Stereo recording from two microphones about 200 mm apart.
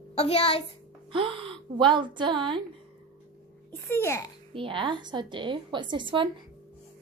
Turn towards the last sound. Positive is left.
turn(degrees=-25)  # may be behind; listen again after turning